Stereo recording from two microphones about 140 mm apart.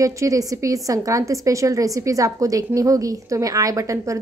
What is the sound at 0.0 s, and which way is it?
A woman's voice, 20° right (ahead or behind).